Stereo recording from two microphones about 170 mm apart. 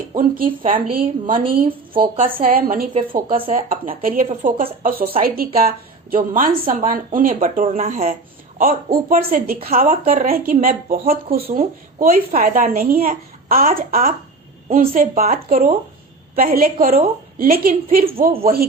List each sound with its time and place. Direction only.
0.2 s a woman's voice: 55° right (ahead or behind)
1.9 s a woman's voice: 30° right (ahead or behind)
2.4 s a woman's voice: 55° right (ahead or behind)
15.1 s a woman's voice: 45° right (ahead or behind)